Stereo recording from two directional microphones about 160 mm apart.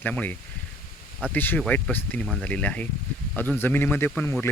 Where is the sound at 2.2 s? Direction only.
Centre (ahead or behind).